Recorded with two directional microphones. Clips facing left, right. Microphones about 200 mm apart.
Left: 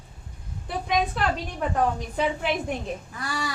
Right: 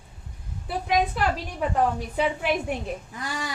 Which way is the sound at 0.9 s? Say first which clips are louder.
Right 1 dB; 5° right (ahead or behind).